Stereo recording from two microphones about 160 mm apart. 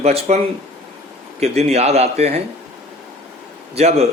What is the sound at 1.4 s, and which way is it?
Speech, 45° right (ahead or behind).